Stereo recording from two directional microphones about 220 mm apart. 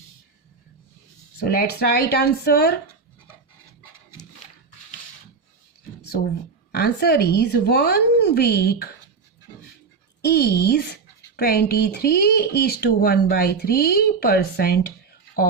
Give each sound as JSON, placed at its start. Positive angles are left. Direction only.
{"t": 1.4, "sound": "speech", "side_deg": 45}
{"t": 6.1, "sound": "speech", "side_deg": 45}
{"t": 10.2, "sound": "speech", "side_deg": 45}